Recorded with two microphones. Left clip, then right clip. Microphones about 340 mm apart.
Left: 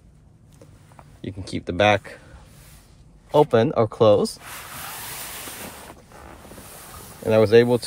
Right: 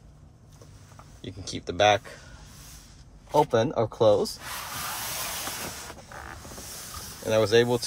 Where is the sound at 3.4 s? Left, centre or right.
Left.